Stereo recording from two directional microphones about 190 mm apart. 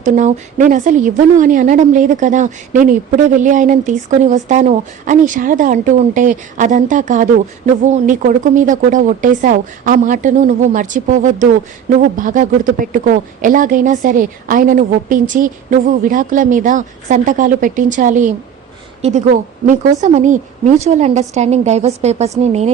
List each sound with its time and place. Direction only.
0.0 s a woman's voice: 40° right (ahead or behind)